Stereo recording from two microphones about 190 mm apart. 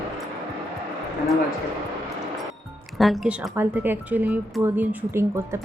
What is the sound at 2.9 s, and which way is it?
Speech, centre (ahead or behind).